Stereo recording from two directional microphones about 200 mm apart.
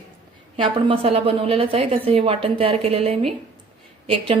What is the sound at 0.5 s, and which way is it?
A woman's voice, 25° right (ahead or behind).